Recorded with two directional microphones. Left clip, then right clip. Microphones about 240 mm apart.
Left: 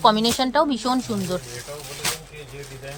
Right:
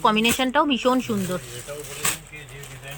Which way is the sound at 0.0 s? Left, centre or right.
Right.